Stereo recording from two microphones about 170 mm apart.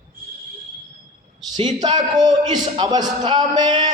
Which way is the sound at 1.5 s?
25° right (ahead or behind).